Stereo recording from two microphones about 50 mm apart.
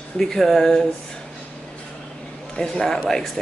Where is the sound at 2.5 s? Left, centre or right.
Centre.